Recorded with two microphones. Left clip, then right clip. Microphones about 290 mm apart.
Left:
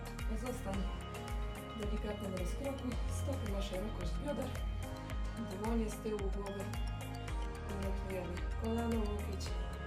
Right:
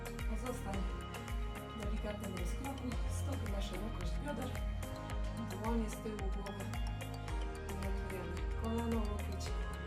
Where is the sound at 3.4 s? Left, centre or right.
Centre.